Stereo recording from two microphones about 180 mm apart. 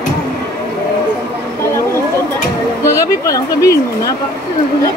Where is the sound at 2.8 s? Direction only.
15° left (ahead or behind).